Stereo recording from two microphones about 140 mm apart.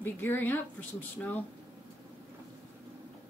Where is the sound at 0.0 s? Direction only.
15° left (ahead or behind).